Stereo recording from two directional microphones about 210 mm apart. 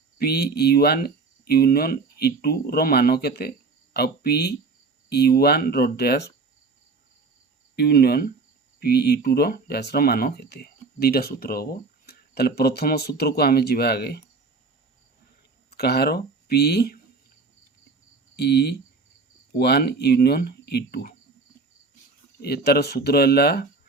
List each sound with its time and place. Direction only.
0.2 s speech: 50° left (ahead or behind)
7.8 s speech: 50° left (ahead or behind)
15.7 s speech: 50° left (ahead or behind)
18.3 s speech: 50° left (ahead or behind)
22.4 s speech: 50° left (ahead or behind)